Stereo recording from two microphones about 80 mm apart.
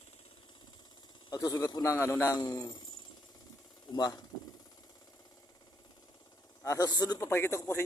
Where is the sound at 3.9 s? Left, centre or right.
Left.